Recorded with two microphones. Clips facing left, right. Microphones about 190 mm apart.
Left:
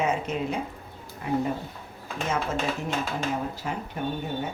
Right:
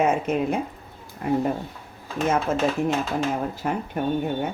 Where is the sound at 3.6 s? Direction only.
55° right (ahead or behind).